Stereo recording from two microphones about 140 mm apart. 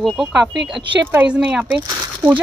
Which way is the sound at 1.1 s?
5° right (ahead or behind).